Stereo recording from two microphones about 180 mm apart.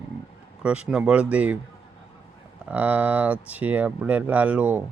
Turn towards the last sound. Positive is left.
turn(degrees=-10)  # may be behind; listen again after turning